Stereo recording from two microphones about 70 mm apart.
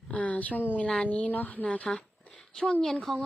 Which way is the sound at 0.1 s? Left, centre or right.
Centre.